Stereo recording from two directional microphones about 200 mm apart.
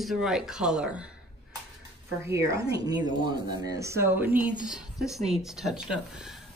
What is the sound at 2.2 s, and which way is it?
Speech, 15° right (ahead or behind).